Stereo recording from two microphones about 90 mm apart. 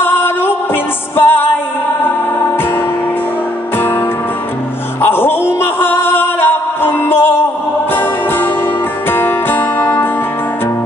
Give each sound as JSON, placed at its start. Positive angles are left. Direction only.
{"t": 0.0, "sound": "music", "side_deg": 25}
{"t": 5.0, "sound": "music", "side_deg": 25}
{"t": 9.1, "sound": "music", "side_deg": 25}